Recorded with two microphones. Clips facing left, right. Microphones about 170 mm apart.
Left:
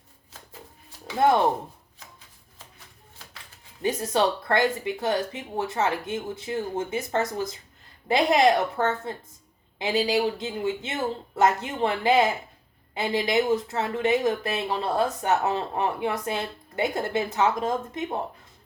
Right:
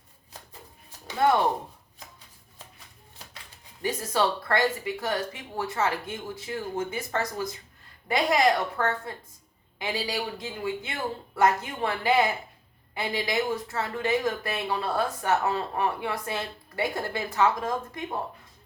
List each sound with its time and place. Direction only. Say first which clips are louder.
3.8 s speech: left 3 dB; 20° left (ahead or behind)